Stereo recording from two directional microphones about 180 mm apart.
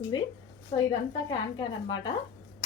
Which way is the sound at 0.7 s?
35° left (ahead or behind).